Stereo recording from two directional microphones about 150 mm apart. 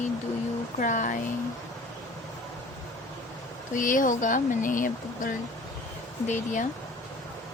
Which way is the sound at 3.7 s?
60° left (ahead or behind).